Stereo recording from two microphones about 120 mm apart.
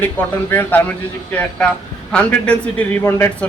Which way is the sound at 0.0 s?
15° left (ahead or behind).